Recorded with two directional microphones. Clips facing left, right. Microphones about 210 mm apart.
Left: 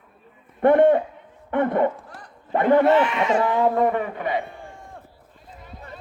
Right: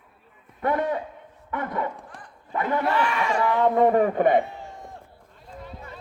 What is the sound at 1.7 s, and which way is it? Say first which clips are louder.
Speech: left 8 dB; 45° left (ahead or behind).